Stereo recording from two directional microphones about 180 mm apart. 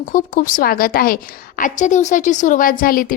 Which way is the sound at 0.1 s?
50° left (ahead or behind).